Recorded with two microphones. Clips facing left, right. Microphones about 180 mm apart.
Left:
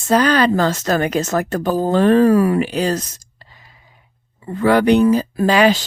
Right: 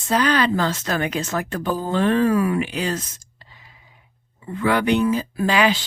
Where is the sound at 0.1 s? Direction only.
40° left (ahead or behind).